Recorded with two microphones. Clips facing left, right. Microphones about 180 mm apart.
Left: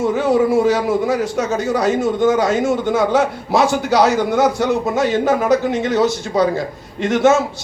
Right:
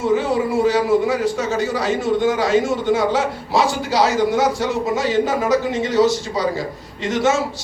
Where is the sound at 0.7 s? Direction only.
50° left (ahead or behind).